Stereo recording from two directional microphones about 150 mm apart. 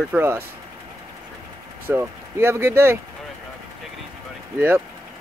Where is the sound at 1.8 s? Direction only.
15° right (ahead or behind).